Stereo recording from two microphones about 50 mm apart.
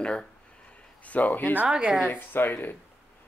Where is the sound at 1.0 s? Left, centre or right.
Left.